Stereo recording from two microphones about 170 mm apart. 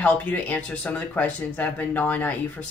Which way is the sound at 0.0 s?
10° left (ahead or behind).